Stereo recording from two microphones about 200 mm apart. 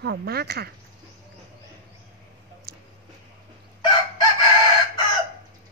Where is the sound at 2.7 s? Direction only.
55° right (ahead or behind).